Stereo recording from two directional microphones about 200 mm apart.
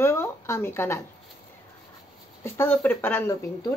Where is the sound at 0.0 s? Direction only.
10° left (ahead or behind).